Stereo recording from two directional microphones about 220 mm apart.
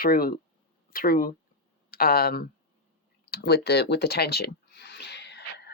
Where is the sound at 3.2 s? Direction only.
45° left (ahead or behind).